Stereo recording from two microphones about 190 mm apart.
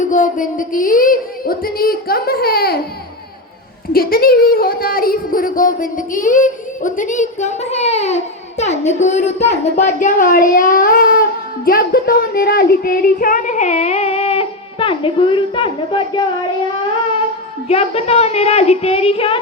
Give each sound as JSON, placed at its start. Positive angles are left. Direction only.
{"t": 0.0, "sound": "speech", "side_deg": 40}
{"t": 3.9, "sound": "speech", "side_deg": 50}
{"t": 17.7, "sound": "speech", "side_deg": 35}